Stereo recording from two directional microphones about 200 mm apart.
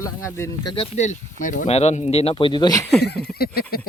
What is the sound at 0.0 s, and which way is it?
Speech, 15° left (ahead or behind).